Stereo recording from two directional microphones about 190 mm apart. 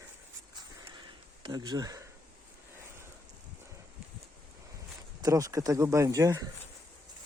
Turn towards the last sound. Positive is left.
turn(degrees=-15)  # may be behind; listen again after turning